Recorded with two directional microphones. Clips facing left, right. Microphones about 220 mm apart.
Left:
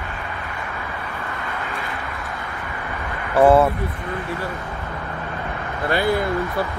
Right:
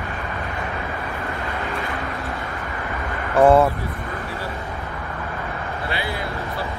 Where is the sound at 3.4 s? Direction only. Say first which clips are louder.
Even; 5° left (ahead or behind).